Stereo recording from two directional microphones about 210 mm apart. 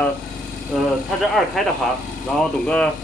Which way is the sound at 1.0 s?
Centre (ahead or behind).